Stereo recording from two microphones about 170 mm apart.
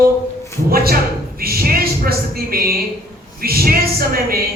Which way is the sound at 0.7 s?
60° right (ahead or behind).